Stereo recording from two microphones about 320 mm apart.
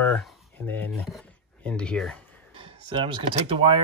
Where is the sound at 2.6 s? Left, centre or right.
Centre.